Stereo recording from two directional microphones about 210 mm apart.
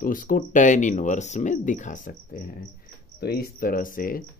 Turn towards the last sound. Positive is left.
turn(degrees=40)  # may be behind; listen again after turning